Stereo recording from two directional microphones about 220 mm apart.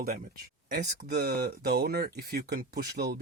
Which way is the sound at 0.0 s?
40° right (ahead or behind).